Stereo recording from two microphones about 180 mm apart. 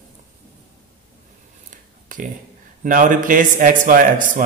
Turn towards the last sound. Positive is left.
turn(degrees=-50)  # may be behind; listen again after turning